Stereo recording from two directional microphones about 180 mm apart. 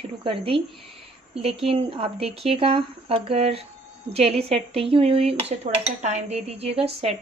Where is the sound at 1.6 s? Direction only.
30° right (ahead or behind).